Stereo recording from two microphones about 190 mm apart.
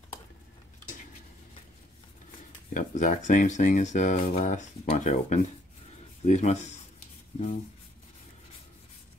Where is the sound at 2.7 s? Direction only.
40° left (ahead or behind).